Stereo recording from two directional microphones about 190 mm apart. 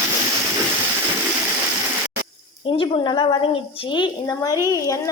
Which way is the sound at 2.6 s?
25° left (ahead or behind).